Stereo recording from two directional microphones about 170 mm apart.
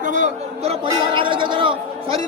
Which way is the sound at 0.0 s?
45° right (ahead or behind).